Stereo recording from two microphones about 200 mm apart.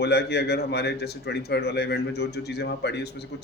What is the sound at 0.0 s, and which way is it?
A man's voice, 55° left (ahead or behind).